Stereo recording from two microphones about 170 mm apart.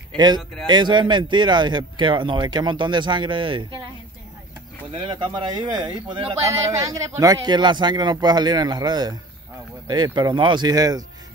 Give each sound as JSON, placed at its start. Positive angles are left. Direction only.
{"t": 0.7, "sound": "speech", "side_deg": -25}
{"t": 4.9, "sound": "speech", "side_deg": -30}